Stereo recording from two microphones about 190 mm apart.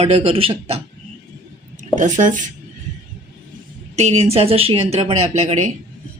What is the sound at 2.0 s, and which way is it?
Speech, 40° right (ahead or behind).